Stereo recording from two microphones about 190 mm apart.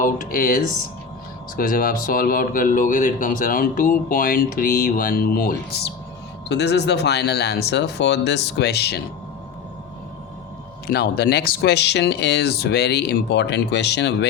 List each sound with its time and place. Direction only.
0.0 s speech: 45° left (ahead or behind)
10.8 s speech: 55° left (ahead or behind)